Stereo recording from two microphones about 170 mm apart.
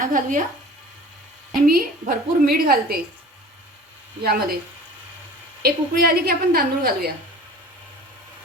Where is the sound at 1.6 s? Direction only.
60° right (ahead or behind).